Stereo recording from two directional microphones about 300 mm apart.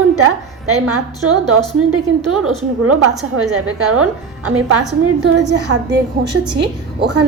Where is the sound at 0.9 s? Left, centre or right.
Right.